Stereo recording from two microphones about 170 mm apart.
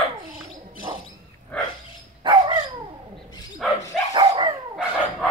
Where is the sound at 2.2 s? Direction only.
25° right (ahead or behind).